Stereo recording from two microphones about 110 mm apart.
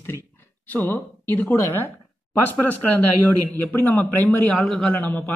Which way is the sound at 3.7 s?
20° left (ahead or behind).